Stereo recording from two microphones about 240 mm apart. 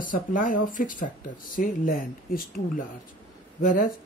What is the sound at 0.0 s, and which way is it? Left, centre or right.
Speech, left.